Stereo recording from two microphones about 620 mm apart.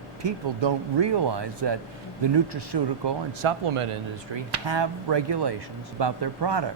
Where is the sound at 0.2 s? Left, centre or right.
Right.